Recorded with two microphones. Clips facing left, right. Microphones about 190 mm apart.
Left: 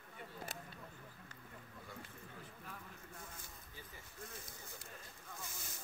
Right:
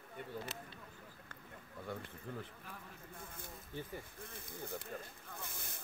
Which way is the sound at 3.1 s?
55° right (ahead or behind).